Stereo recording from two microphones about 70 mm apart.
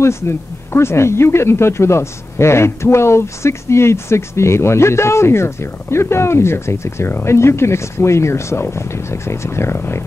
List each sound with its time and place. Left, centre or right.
0.0 s speech: left